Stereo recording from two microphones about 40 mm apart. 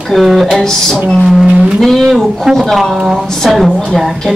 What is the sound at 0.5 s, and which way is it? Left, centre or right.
A woman's voice, centre.